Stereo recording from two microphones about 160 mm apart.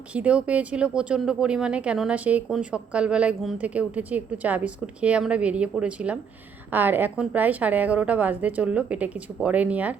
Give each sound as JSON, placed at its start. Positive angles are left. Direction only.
{"t": 0.1, "sound": "speech", "side_deg": -5}